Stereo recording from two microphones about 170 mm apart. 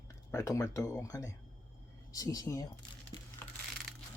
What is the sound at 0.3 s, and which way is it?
Speech, 20° left (ahead or behind).